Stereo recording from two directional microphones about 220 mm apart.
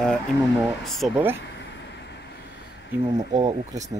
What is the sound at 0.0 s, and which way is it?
Speech, centre (ahead or behind).